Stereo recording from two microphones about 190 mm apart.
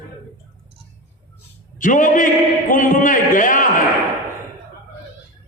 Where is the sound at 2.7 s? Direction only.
45° left (ahead or behind).